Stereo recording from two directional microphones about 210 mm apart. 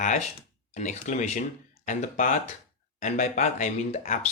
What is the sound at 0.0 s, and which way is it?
Speech, 35° left (ahead or behind).